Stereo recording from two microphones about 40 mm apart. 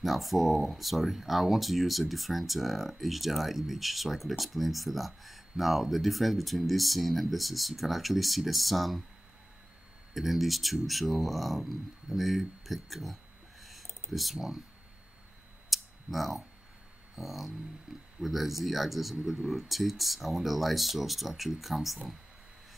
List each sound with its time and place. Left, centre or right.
0.0 s speech: centre
10.1 s speech: centre
15.7 s a sound: centre
17.1 s speech: centre